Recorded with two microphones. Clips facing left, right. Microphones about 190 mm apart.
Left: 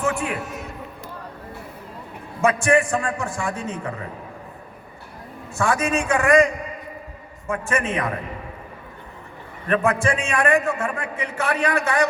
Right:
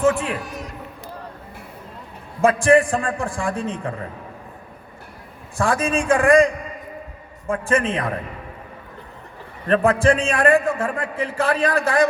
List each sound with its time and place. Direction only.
0.0 s a sound: 30° right (ahead or behind)
2.4 s a man's voice: 30° right (ahead or behind)
5.5 s a man's voice: 30° right (ahead or behind)
7.5 s a man's voice: 30° right (ahead or behind)
9.6 s a man's voice: 30° right (ahead or behind)